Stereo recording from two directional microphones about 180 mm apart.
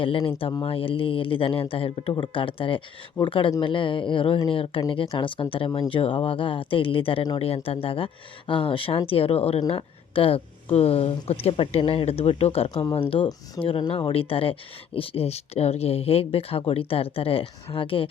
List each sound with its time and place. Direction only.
0.0 s a woman's voice: 30° left (ahead or behind)